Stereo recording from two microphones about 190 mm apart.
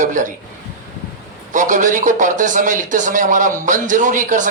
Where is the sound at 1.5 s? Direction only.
40° right (ahead or behind).